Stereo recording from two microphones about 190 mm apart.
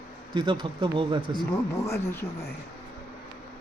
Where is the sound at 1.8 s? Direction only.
15° left (ahead or behind).